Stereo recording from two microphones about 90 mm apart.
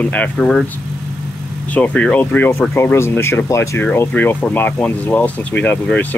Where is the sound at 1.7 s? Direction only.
15° left (ahead or behind); by 3.9 s 35° left (ahead or behind).